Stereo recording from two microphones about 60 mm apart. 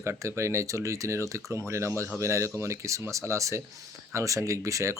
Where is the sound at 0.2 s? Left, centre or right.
Right.